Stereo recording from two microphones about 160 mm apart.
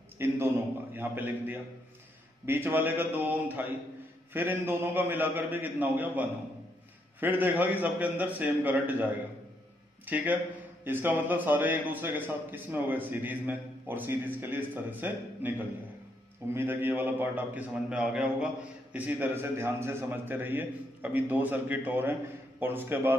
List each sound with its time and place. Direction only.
0.2 s a man's voice: 15° right (ahead or behind)
16.5 s a man's voice: 15° right (ahead or behind)